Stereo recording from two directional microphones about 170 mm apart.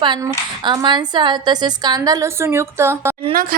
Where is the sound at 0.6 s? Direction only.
25° right (ahead or behind).